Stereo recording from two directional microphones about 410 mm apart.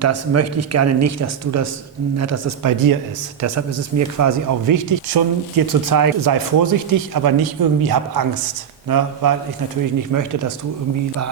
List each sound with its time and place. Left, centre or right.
0.0 s speech: right